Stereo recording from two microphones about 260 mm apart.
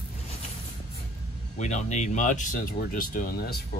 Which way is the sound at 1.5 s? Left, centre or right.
Left.